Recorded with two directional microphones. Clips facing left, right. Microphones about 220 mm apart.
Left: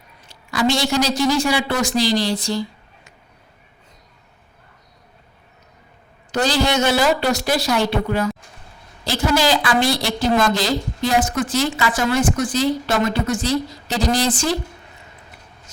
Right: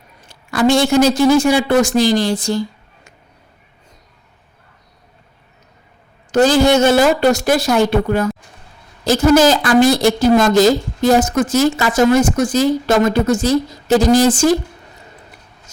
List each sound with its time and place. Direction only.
0.3 s a man's voice: 50° right (ahead or behind)
6.3 s a woman's voice: 50° right (ahead or behind)